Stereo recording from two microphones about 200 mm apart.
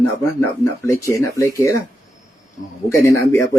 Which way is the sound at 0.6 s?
15° left (ahead or behind).